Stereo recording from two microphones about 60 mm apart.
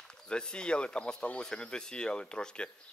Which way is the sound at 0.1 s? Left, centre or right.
Centre.